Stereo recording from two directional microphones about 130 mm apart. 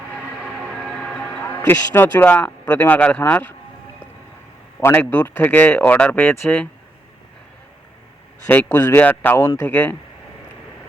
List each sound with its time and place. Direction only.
0.4 s a sound: centre (ahead or behind)
4.8 s speech: 15° left (ahead or behind)
8.5 s speech: 15° left (ahead or behind)